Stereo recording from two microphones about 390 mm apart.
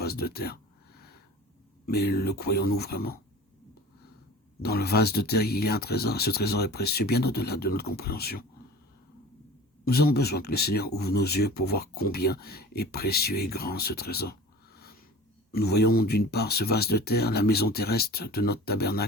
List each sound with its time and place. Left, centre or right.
0.0 s speech: left
1.9 s speech: left
4.6 s speech: left
9.8 s speech: left
15.5 s speech: left